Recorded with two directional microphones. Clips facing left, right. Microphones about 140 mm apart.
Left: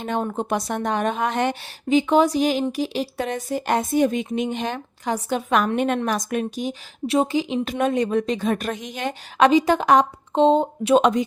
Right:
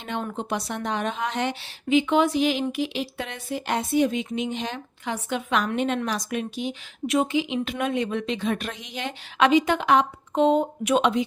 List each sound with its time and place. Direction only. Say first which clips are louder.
0.0 s a woman's voice: left 5 dB; 40° left (ahead or behind)
10.3 s speech: left 3 dB; 30° left (ahead or behind)
11.0 s speech: left 3 dB; 45° left (ahead or behind)